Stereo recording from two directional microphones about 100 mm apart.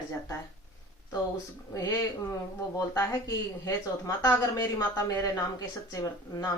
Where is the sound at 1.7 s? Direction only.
35° left (ahead or behind).